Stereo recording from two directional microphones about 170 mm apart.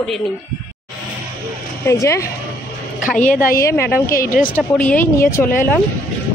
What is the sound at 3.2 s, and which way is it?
Speech, 50° left (ahead or behind).